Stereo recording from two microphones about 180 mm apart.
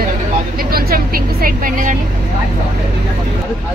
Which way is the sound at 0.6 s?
55° right (ahead or behind).